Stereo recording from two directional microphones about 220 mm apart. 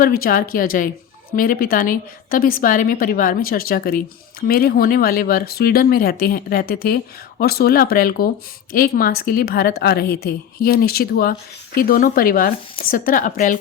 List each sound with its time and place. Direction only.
0.0 s a woman's voice: 40° left (ahead or behind)